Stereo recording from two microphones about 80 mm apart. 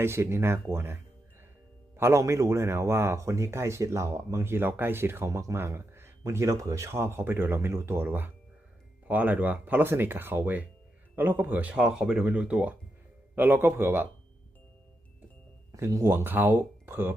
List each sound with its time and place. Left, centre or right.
0.0 s speech: right
2.0 s speech: right
11.7 s speech: centre
13.3 s speech: right
15.9 s speech: right